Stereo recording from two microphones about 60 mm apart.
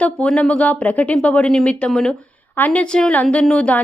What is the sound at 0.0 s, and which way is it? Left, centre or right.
Speech, left.